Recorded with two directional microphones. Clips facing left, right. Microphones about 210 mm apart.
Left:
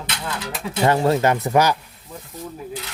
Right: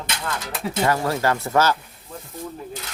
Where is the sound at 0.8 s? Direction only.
25° left (ahead or behind).